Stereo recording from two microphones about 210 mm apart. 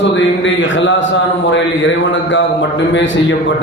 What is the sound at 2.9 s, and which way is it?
Speech, 60° left (ahead or behind).